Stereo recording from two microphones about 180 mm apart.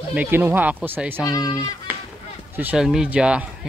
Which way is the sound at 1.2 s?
20° left (ahead or behind).